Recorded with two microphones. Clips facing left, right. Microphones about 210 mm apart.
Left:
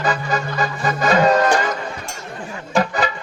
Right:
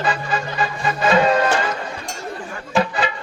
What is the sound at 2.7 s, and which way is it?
Music, 40° left (ahead or behind).